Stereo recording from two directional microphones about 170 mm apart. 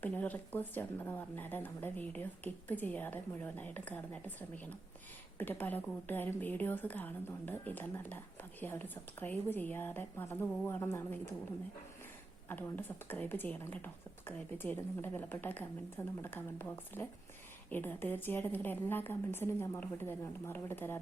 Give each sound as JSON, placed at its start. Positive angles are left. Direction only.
{"t": 0.0, "sound": "speech", "side_deg": 10}
{"t": 12.5, "sound": "speech", "side_deg": 10}